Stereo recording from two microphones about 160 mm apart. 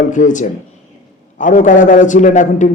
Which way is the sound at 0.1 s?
50° left (ahead or behind).